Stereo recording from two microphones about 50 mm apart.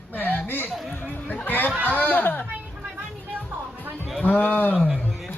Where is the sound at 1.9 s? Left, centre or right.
Left.